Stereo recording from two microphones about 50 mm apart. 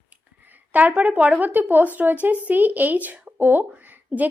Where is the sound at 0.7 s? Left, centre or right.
Right.